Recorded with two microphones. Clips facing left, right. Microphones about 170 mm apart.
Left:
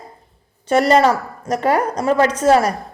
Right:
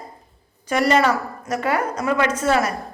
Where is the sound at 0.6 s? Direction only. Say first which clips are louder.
Left 4 dB; 30° left (ahead or behind).